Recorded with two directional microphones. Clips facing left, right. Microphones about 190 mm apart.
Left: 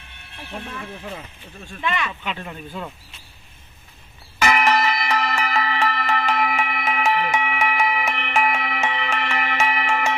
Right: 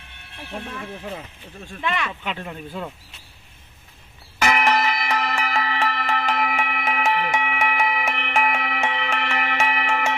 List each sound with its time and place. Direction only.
0.5 s speech: 35° right (ahead or behind)
1.8 s speech: 60° right (ahead or behind); by 2.9 s 40° right (ahead or behind)
4.4 s music: 55° right (ahead or behind)